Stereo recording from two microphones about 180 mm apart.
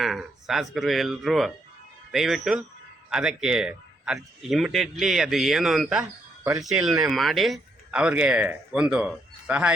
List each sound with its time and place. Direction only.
0.0 s a man's voice: centre (ahead or behind)